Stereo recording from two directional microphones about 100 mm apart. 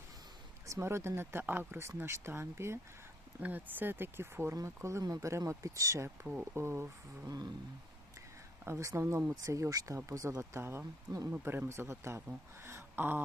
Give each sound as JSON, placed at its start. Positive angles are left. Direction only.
{"t": 0.7, "sound": "speech", "side_deg": -25}
{"t": 7.3, "sound": "speech", "side_deg": -40}
{"t": 8.6, "sound": "speech", "side_deg": -30}
{"t": 12.6, "sound": "a sound", "side_deg": -25}